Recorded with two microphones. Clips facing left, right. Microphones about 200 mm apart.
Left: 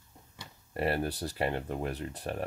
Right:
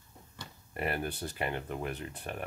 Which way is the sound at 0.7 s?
35° left (ahead or behind).